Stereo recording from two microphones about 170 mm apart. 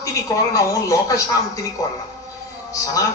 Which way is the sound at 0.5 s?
20° left (ahead or behind).